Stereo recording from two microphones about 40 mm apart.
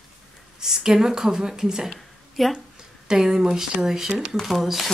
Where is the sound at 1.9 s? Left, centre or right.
Centre.